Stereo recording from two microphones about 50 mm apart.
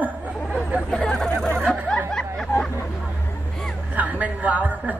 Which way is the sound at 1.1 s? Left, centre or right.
Centre.